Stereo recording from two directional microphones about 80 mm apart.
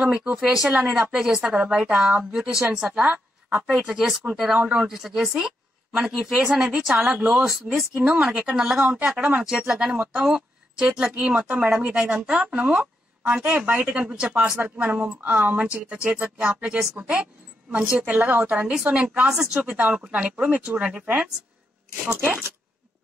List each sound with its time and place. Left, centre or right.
0.0 s a woman's voice: centre
8.0 s a woman's voice: centre